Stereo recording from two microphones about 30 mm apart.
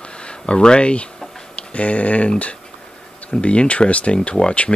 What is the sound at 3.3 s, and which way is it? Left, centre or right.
Speech, left.